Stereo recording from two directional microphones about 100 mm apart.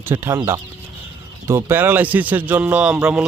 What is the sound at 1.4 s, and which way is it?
Speech, 25° right (ahead or behind).